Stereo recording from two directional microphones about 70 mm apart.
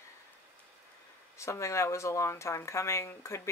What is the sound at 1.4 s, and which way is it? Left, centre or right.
Speech, left.